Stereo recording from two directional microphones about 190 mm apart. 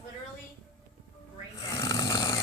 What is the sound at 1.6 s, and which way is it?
Snoring, 15° left (ahead or behind).